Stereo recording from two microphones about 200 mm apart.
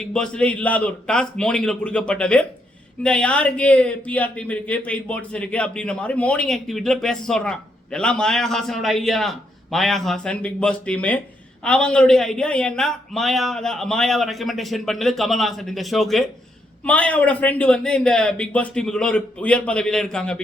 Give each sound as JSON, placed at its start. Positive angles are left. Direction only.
{"t": 0.0, "sound": "speech", "side_deg": 5}